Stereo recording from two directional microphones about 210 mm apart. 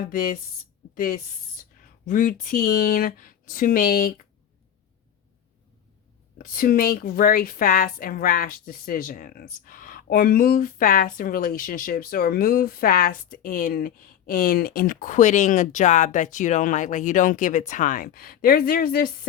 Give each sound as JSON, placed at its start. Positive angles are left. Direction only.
{"t": 0.9, "sound": "speech", "side_deg": 45}
{"t": 6.4, "sound": "a woman's voice", "side_deg": 40}